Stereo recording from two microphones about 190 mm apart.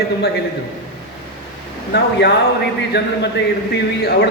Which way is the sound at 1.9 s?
60° left (ahead or behind).